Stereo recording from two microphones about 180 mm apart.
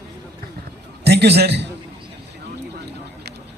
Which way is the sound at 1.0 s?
65° right (ahead or behind).